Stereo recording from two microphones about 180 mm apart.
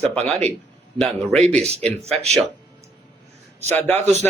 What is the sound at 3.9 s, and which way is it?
Speech, 40° right (ahead or behind).